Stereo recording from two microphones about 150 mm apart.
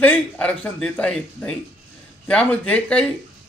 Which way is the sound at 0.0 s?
10° left (ahead or behind).